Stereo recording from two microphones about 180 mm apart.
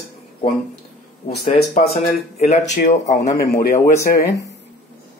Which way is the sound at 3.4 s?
55° left (ahead or behind).